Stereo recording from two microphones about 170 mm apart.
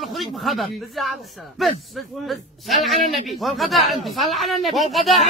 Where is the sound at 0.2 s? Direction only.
Centre (ahead or behind).